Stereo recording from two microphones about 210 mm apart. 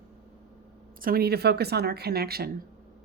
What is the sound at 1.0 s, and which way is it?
Speech, 45° right (ahead or behind).